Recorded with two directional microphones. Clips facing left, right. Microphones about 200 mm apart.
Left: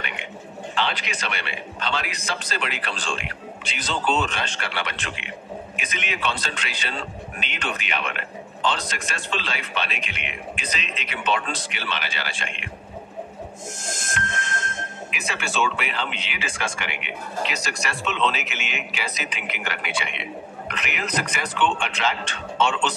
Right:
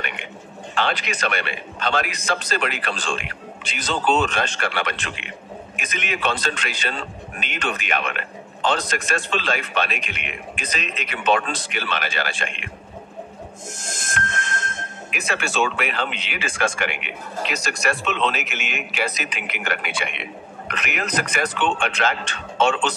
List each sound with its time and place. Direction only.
0.7 s speech: 50° right (ahead or behind)
15.0 s speech: 45° right (ahead or behind)